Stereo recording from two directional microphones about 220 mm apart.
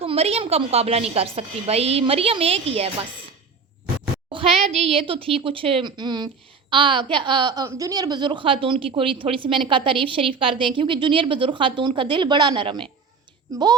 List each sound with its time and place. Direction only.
0.0 s a woman's voice: 25° right (ahead or behind)
4.3 s a woman's voice: 25° right (ahead or behind)